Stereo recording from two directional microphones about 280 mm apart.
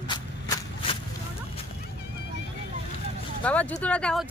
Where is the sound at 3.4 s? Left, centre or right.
Centre.